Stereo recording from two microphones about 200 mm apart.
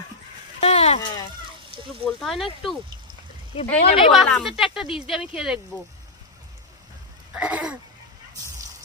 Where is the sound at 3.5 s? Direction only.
30° left (ahead or behind).